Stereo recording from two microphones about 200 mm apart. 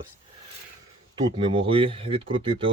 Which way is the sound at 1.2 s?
25° right (ahead or behind).